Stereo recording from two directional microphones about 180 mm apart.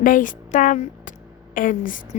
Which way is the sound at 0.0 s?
50° left (ahead or behind).